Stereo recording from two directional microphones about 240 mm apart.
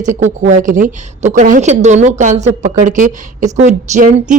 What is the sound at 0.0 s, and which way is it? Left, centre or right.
A woman's voice, right.